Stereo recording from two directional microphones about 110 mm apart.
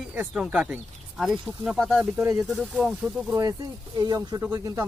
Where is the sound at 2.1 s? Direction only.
25° right (ahead or behind).